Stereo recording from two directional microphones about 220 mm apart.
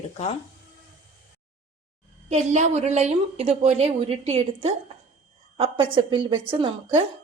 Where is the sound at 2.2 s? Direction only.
30° right (ahead or behind).